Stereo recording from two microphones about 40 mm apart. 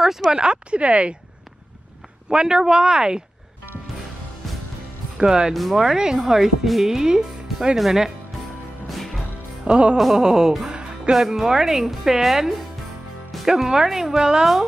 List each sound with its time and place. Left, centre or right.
0.0 s speech: centre; by 1.1 s right
2.2 s speech: centre
5.1 s speech: centre
5.5 s speech: centre
8.8 s music: centre
9.7 s music: right
10.1 s speech: centre
10.7 s music: right
11.1 s speech: centre
13.5 s speech: centre